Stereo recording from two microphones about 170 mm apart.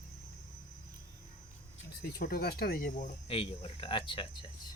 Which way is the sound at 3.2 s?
35° left (ahead or behind).